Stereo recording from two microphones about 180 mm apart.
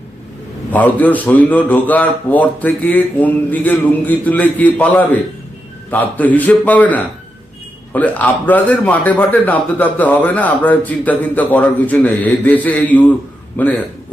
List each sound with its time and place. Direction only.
0.7 s a man's voice: 10° left (ahead or behind)